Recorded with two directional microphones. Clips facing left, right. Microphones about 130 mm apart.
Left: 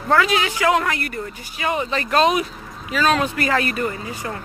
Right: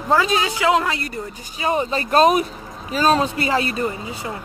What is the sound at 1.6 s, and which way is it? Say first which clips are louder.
Speech: right 2 dB; 35° right (ahead or behind).